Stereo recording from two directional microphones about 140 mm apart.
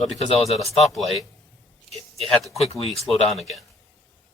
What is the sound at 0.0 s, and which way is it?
Speech, centre (ahead or behind).